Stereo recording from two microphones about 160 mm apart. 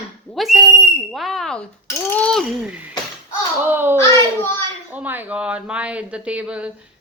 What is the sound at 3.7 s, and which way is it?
Speech, 15° right (ahead or behind).